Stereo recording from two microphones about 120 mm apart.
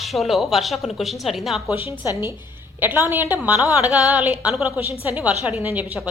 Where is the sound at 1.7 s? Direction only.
15° right (ahead or behind).